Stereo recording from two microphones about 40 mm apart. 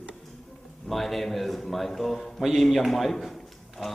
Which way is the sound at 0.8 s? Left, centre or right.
Centre.